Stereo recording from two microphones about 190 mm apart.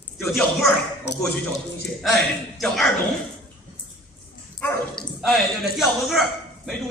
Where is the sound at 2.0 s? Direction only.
Centre (ahead or behind).